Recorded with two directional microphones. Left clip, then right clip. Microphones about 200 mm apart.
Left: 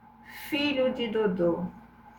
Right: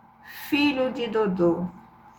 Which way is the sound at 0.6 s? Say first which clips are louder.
Right 2 dB; 30° right (ahead or behind).